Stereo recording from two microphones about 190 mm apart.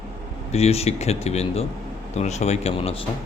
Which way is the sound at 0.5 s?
35° left (ahead or behind).